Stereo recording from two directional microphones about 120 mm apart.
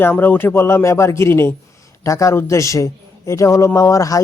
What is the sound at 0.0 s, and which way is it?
Speech, 15° left (ahead or behind).